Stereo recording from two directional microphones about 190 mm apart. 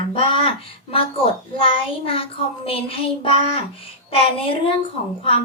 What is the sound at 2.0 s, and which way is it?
A child's voice, 30° left (ahead or behind).